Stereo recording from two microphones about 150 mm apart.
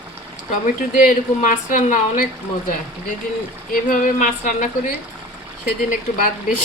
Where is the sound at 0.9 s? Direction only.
60° left (ahead or behind).